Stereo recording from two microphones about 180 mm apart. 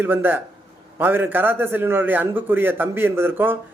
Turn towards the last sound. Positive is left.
turn(degrees=-10)  # may be behind; listen again after turning